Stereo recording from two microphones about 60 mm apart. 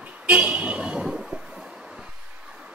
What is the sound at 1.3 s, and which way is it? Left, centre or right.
Train, centre.